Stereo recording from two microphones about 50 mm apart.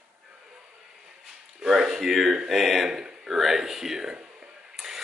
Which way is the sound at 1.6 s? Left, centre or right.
Centre.